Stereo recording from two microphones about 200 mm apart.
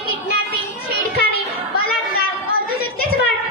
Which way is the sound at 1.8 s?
50° left (ahead or behind).